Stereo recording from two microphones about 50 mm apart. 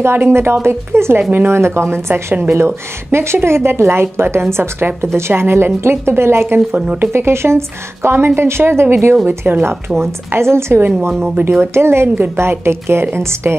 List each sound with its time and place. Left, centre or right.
0.0 s a woman's voice: right